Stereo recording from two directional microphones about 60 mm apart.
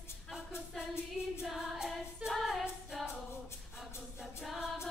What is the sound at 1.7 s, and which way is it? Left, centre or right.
Choir, centre.